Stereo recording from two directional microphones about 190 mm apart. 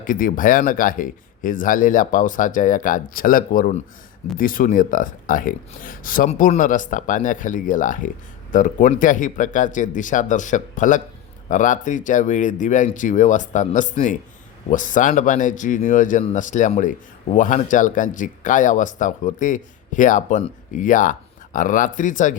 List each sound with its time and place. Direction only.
0.0 s speech: 45° left (ahead or behind)